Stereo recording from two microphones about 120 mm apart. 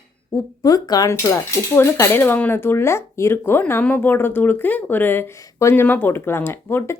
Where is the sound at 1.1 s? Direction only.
20° left (ahead or behind).